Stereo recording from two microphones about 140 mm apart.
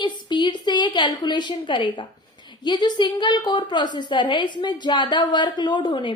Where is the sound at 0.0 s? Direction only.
30° left (ahead or behind).